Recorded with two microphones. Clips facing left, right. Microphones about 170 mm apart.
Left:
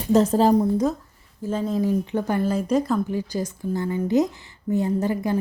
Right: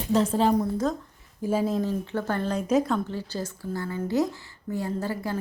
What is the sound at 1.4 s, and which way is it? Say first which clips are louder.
Speech: even; 10° right (ahead or behind).